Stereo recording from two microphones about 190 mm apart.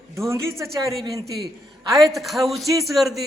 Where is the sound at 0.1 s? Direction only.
15° right (ahead or behind).